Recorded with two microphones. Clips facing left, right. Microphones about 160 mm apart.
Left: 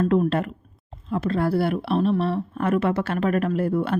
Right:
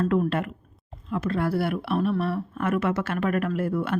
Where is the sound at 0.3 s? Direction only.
35° left (ahead or behind).